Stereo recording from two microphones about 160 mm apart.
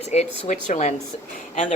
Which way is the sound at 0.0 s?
45° left (ahead or behind).